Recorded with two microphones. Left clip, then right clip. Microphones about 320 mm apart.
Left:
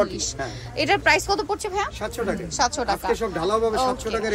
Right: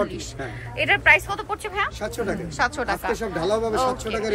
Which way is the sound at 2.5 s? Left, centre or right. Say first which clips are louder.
Left 1 dB; centre.